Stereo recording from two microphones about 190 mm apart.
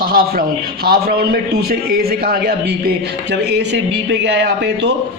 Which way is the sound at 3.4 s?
65° right (ahead or behind).